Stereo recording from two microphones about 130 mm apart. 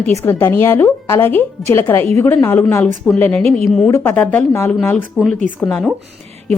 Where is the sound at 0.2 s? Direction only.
15° left (ahead or behind).